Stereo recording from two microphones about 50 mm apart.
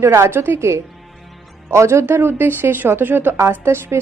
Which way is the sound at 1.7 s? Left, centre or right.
Right.